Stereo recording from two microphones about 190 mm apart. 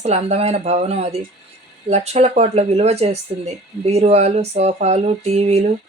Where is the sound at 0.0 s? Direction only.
35° right (ahead or behind).